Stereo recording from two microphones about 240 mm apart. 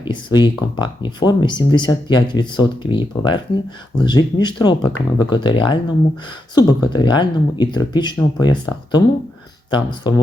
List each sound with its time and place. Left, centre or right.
0.0 s speech: centre